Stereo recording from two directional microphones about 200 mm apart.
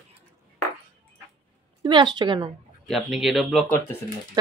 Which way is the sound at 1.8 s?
20° right (ahead or behind).